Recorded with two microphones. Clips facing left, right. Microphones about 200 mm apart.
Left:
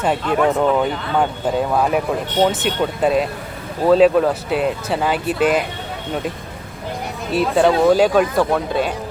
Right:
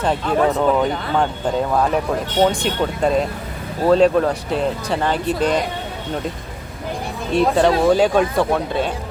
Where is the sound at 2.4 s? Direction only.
5° left (ahead or behind).